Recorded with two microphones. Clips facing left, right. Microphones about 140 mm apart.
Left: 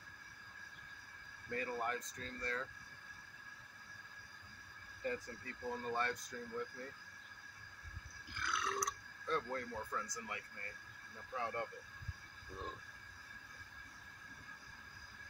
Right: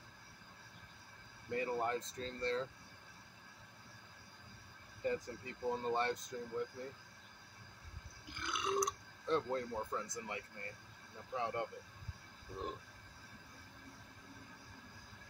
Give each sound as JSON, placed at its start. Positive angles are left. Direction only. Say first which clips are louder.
{"t": 1.5, "sound": "speech", "louder": "right 4 dB", "side_deg": -20}
{"t": 5.0, "sound": "speech", "louder": "right 4 dB", "side_deg": -20}
{"t": 8.3, "sound": "speech", "louder": "right 3 dB", "side_deg": -20}